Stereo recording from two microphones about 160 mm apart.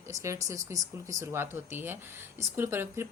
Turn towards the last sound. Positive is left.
turn(degrees=-15)  # may be behind; listen again after turning